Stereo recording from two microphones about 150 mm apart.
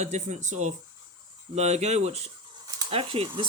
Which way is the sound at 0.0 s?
50° right (ahead or behind).